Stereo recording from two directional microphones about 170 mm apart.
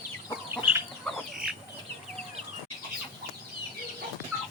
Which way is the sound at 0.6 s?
10° right (ahead or behind).